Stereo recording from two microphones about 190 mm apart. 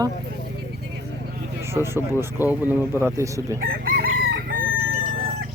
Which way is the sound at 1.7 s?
15° right (ahead or behind).